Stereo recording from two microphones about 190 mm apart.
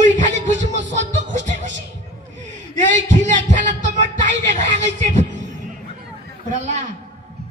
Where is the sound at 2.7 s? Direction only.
40° right (ahead or behind).